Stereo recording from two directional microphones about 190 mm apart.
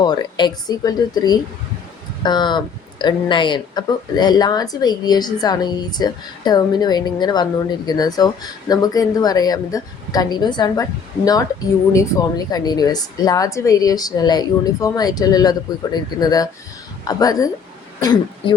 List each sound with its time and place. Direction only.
0.0 s speech: 20° left (ahead or behind)